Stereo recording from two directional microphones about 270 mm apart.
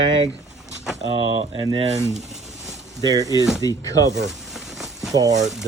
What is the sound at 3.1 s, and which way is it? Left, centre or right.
Speech, centre.